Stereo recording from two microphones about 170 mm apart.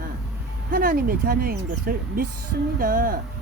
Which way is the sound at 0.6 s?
55° right (ahead or behind).